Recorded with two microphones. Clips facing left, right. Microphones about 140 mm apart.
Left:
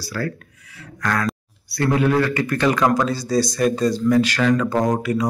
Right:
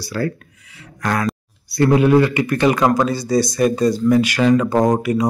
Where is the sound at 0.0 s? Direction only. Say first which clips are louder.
Right 4 dB; 20° right (ahead or behind).